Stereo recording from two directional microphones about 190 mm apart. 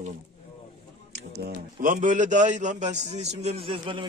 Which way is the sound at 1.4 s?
50° right (ahead or behind).